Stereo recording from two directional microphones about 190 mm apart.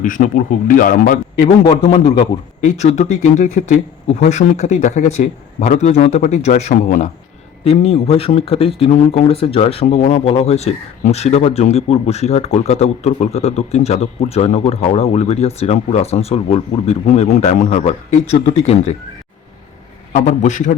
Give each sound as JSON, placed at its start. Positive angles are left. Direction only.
{"t": 0.0, "sound": "a man's voice", "side_deg": 45}
{"t": 1.5, "sound": "a man's voice", "side_deg": 30}
{"t": 2.6, "sound": "speech", "side_deg": 40}
{"t": 20.1, "sound": "speech", "side_deg": 40}